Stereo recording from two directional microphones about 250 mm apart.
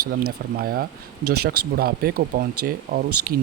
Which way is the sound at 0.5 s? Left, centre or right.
Right.